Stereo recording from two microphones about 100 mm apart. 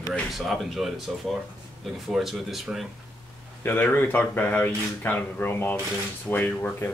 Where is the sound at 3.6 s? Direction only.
20° left (ahead or behind).